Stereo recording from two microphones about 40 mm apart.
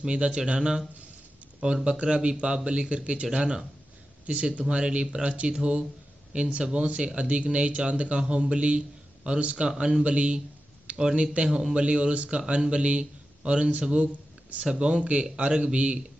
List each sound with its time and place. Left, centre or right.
0.0 s a man's voice: right
1.9 s a man's voice: right